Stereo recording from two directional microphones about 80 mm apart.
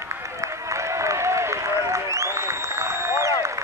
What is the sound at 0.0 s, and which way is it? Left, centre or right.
Applause, right.